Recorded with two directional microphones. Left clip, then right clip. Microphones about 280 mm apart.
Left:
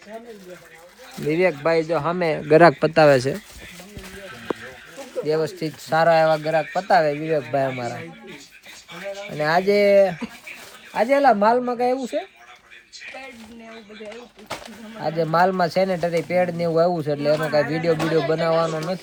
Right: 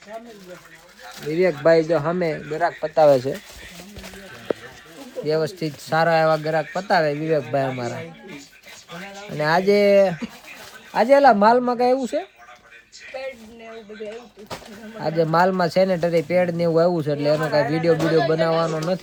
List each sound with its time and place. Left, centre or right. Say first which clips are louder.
1.3 s speech: right 2 dB; centre
2.5 s speech: left 13 dB; left
5.2 s speech: even; centre
9.3 s speech: right 1 dB; centre
15.0 s speech: right 1 dB; centre